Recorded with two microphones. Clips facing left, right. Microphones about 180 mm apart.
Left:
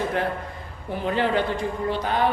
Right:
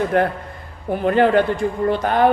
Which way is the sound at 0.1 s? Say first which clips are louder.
Right 7 dB; 55° right (ahead or behind).